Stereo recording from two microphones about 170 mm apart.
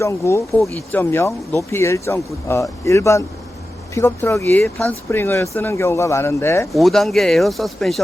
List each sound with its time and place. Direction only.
0.0 s speech: 15° left (ahead or behind)
6.7 s speech: centre (ahead or behind)